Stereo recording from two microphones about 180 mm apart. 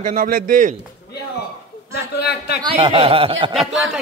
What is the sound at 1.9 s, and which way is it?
Speech, 65° left (ahead or behind).